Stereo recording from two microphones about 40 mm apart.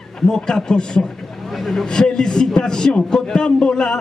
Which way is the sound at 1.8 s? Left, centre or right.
Centre.